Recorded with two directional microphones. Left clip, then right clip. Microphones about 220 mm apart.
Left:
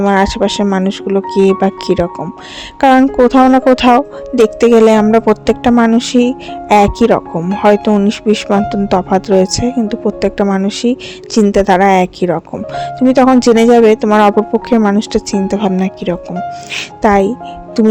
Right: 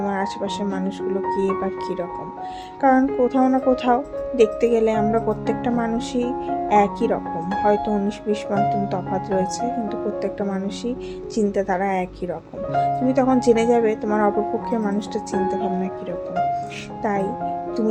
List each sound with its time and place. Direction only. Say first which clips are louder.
0.0 s speech: left 13 dB; 40° left (ahead or behind)